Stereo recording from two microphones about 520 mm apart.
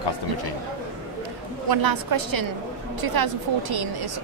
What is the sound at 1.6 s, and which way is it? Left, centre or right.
A woman's voice, right.